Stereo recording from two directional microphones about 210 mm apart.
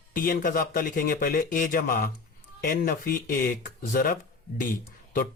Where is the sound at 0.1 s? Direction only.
40° left (ahead or behind).